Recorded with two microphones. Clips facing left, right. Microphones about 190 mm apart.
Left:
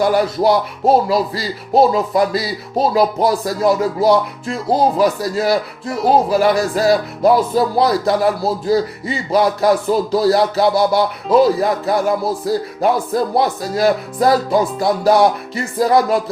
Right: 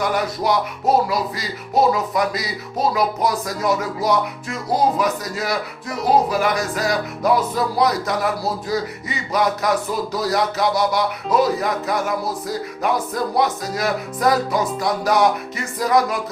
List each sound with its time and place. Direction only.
0.0 s speech: 30° left (ahead or behind)